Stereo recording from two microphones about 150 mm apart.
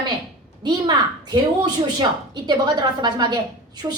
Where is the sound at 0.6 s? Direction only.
30° right (ahead or behind).